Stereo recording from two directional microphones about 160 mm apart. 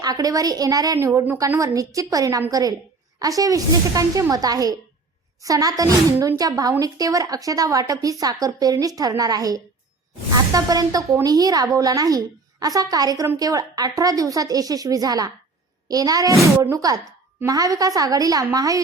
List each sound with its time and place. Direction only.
0.0 s a woman's voice: 25° right (ahead or behind)